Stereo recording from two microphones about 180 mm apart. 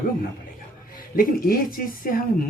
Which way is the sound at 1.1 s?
55° left (ahead or behind).